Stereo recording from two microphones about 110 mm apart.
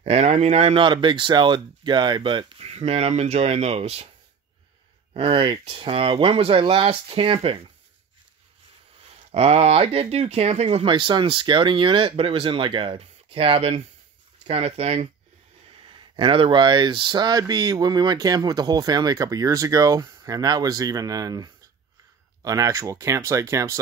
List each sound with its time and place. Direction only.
0.0 s speech: 70° right (ahead or behind)
0.7 s speech: 50° right (ahead or behind)
2.6 s speech: 70° right (ahead or behind)
5.1 s speech: 50° right (ahead or behind)
9.1 s speech: 65° right (ahead or behind)
10.9 s speech: 45° right (ahead or behind); by 15.0 s 70° right (ahead or behind)
15.7 s speech: 50° right (ahead or behind); by 23.8 s 25° right (ahead or behind)